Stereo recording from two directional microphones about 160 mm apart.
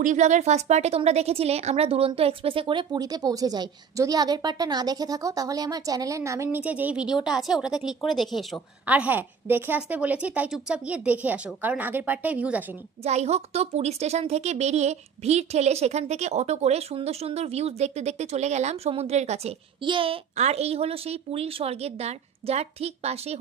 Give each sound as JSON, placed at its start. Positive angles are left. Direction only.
{"t": 0.0, "sound": "a woman's voice", "side_deg": -50}
{"t": 13.0, "sound": "a woman's voice", "side_deg": -40}